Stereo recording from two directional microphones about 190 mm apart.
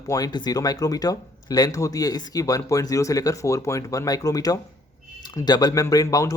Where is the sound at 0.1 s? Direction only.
20° left (ahead or behind).